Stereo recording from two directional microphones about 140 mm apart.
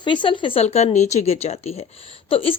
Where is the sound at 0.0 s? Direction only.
35° left (ahead or behind).